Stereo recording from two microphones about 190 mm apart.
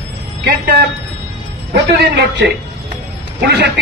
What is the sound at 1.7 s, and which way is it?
A man's voice, 60° right (ahead or behind).